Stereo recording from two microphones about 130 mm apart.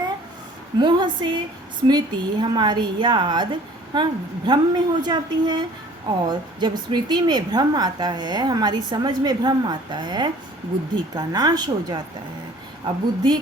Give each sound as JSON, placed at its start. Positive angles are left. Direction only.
{"t": 0.8, "sound": "speech", "side_deg": -35}